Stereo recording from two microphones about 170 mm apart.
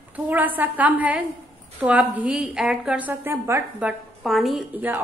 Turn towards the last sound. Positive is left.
turn(degrees=-10)  # may be behind; listen again after turning